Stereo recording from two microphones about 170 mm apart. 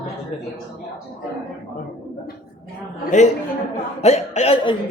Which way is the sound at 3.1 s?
45° left (ahead or behind).